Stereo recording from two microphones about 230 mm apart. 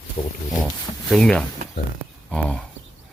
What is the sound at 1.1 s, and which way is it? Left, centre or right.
Speech, centre.